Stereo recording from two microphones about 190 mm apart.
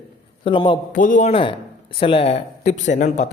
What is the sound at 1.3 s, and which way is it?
A woman's voice, 25° left (ahead or behind).